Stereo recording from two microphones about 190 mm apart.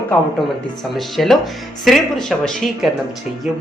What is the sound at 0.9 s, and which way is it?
Speech, centre (ahead or behind).